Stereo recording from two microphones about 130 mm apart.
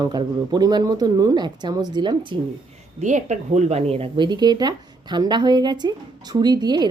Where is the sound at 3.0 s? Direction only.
70° right (ahead or behind); by 6.9 s 35° right (ahead or behind).